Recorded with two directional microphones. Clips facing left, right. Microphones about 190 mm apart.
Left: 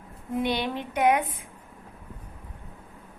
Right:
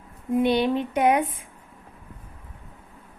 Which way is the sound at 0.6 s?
25° right (ahead or behind).